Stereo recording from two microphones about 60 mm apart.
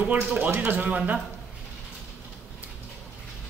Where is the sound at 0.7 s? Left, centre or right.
Right.